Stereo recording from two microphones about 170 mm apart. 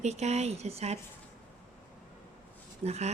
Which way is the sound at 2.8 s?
40° right (ahead or behind).